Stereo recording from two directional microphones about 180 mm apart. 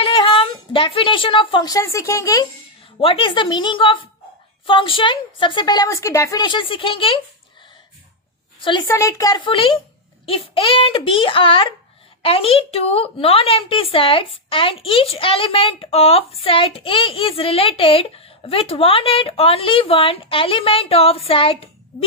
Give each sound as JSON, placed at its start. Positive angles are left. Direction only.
{"t": 0.0, "sound": "speech", "side_deg": 30}
{"t": 3.0, "sound": "a woman's voice", "side_deg": 30}
{"t": 8.6, "sound": "a woman's voice", "side_deg": 25}